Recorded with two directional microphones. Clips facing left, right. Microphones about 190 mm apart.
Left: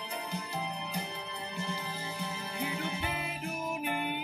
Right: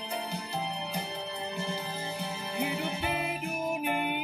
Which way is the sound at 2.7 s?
20° right (ahead or behind).